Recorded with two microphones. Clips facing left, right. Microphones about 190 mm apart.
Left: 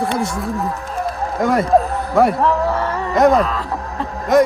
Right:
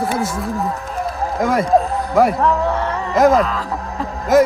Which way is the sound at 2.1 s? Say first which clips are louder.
Even; centre (ahead or behind).